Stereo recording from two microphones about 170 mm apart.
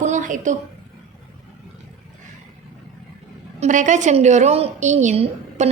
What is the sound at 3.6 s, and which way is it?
A woman's voice, 45° right (ahead or behind).